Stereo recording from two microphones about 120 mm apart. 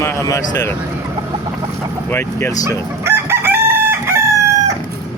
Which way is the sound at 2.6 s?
20° right (ahead or behind).